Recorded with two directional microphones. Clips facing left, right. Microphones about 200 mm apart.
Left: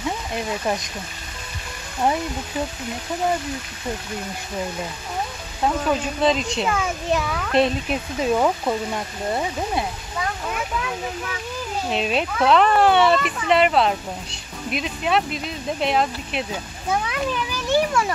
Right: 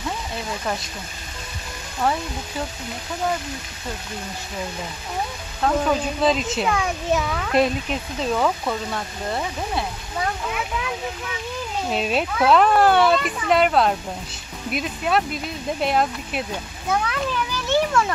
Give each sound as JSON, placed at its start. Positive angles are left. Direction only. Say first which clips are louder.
{"t": 2.0, "sound": "speech", "louder": "left 1 dB", "side_deg": 20}
{"t": 5.9, "sound": "speech", "louder": "even", "side_deg": 0}
{"t": 8.2, "sound": "speech", "louder": "left 2 dB", "side_deg": 15}
{"t": 11.9, "sound": "speech", "louder": "even", "side_deg": 0}
{"t": 17.0, "sound": "speech", "louder": "even", "side_deg": 15}